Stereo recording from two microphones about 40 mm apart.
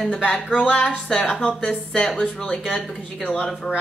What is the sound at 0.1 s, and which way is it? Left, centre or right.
Speech, left.